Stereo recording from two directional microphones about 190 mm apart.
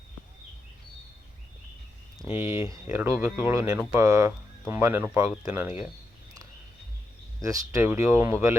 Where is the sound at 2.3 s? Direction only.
15° right (ahead or behind).